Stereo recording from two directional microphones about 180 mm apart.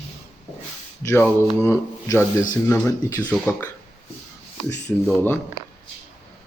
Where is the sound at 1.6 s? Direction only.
15° left (ahead or behind).